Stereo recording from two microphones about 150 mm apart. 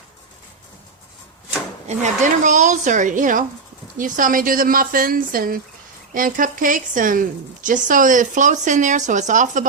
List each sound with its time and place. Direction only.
1.9 s speech: 55° right (ahead or behind)